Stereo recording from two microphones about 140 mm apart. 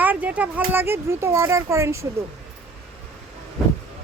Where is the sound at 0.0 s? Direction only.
10° right (ahead or behind).